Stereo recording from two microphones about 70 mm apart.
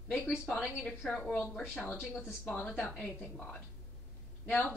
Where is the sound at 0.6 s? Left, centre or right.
Centre.